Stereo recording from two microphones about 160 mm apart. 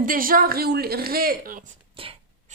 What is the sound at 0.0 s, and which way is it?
Speech, 60° right (ahead or behind).